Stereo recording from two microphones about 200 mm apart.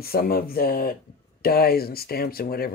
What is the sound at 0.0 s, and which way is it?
Speech, 50° left (ahead or behind).